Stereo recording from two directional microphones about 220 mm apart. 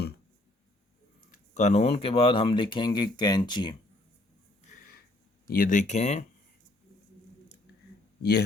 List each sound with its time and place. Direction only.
1.5 s speech: 30° left (ahead or behind)
4.6 s a sound: 40° left (ahead or behind)
5.5 s speech: 40° left (ahead or behind)
8.2 s speech: 50° left (ahead or behind)